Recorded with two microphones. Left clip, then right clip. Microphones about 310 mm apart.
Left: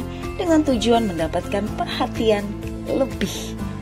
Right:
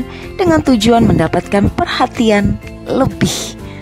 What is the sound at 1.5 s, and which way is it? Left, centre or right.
Speech, right.